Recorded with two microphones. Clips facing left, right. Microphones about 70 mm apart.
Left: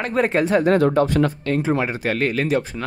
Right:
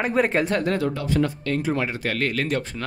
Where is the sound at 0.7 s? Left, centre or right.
Left.